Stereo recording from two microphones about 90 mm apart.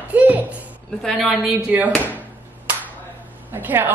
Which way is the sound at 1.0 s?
Centre (ahead or behind).